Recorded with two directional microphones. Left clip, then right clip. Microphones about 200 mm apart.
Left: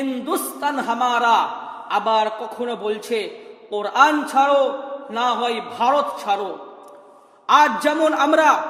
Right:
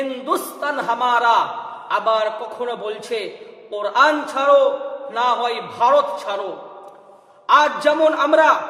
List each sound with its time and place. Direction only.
0.1 s a man's voice: 35° left (ahead or behind)
7.4 s a man's voice: 40° left (ahead or behind)